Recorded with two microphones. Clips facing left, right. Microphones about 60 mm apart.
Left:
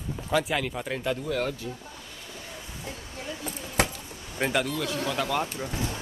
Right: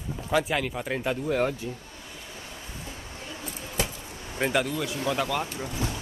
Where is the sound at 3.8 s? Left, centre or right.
Left.